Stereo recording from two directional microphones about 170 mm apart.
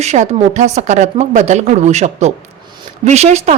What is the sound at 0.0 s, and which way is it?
A woman's voice, 45° right (ahead or behind).